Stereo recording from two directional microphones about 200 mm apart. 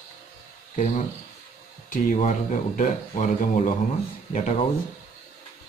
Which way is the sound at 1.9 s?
40° left (ahead or behind).